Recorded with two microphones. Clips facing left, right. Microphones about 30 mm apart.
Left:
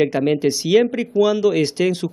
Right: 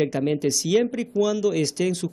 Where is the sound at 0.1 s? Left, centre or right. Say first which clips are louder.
Left 5 dB; left.